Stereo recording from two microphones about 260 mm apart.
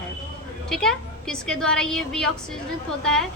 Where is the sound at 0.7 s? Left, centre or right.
Centre.